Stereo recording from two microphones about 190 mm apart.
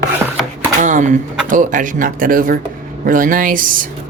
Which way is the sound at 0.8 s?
40° right (ahead or behind).